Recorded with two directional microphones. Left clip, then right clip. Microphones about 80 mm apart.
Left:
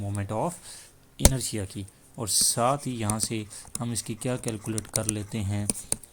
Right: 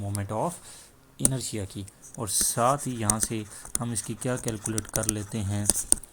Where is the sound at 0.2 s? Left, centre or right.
Left; by 5.6 s centre.